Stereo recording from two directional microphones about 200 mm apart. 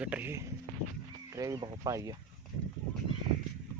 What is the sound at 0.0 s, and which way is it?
Speech, 10° right (ahead or behind).